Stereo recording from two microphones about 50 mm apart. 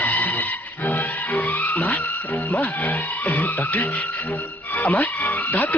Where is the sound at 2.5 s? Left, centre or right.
Left.